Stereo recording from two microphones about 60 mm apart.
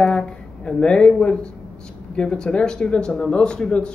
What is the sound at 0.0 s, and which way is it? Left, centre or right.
Speech, centre.